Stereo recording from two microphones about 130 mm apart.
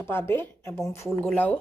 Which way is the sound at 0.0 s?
20° left (ahead or behind).